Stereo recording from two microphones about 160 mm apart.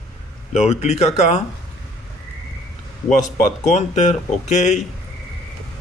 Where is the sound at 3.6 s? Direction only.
45° left (ahead or behind).